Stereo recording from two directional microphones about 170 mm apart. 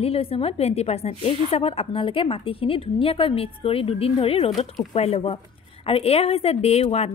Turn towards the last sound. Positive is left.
turn(degrees=40)  # may be behind; listen again after turning